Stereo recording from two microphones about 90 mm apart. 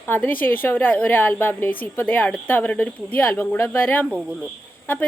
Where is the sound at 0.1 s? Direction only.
20° left (ahead or behind).